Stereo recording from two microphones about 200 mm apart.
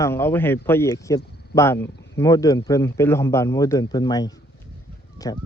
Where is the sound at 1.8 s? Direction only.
55° left (ahead or behind).